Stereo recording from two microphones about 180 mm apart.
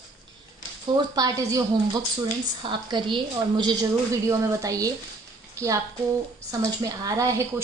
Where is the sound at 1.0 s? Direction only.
20° right (ahead or behind).